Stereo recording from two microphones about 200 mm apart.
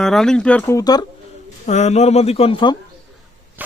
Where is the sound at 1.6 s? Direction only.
35° left (ahead or behind).